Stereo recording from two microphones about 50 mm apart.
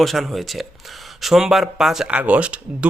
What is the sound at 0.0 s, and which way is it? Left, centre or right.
Speech, centre.